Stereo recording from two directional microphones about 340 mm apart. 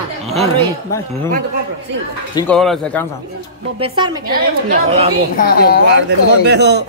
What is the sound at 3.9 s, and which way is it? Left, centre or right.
Speech, centre.